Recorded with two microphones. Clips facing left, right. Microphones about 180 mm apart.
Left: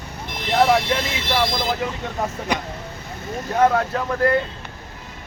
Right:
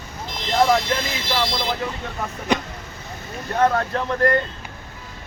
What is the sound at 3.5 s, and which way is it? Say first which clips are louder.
Speech: left 1 dB; 5° left (ahead or behind).